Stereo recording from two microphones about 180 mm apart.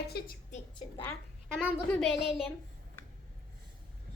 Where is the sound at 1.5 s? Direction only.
10° left (ahead or behind).